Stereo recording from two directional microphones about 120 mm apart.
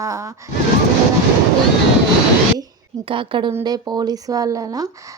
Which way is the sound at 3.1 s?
45° right (ahead or behind).